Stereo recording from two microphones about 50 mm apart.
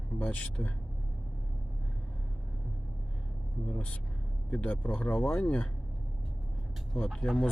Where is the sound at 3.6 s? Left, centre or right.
Left.